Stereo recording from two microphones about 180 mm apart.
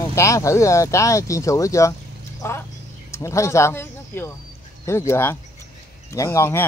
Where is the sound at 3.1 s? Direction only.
15° left (ahead or behind).